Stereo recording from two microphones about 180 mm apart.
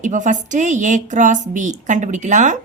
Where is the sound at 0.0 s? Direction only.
45° right (ahead or behind).